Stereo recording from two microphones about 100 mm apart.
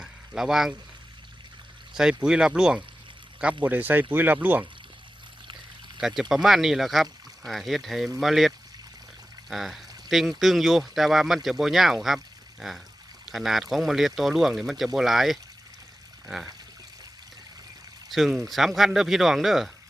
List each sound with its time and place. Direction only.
0.0 s a sound: 5° right (ahead or behind)
2.0 s speech: 5° right (ahead or behind)
6.0 s speech: 5° right (ahead or behind)
18.1 s speech: centre (ahead or behind)